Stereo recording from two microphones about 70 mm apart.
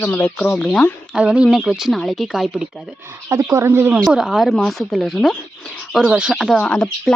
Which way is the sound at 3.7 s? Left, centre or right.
Right.